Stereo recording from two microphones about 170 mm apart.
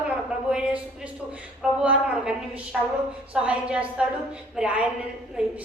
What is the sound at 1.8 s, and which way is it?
A woman's voice, 5° right (ahead or behind).